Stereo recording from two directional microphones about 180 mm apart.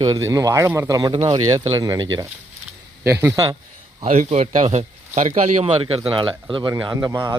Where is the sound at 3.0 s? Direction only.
15° right (ahead or behind).